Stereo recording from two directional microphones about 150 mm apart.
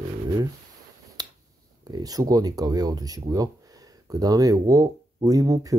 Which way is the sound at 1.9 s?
25° right (ahead or behind).